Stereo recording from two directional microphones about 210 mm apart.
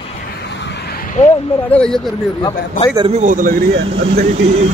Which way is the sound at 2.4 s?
20° left (ahead or behind).